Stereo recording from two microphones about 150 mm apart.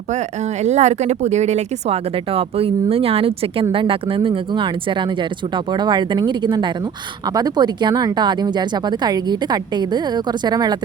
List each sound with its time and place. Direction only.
0.6 s speech: 50° right (ahead or behind); by 10.8 s 30° right (ahead or behind)